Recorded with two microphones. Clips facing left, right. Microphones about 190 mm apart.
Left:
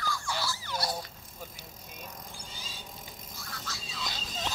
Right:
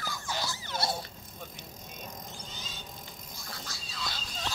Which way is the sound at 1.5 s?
10° left (ahead or behind).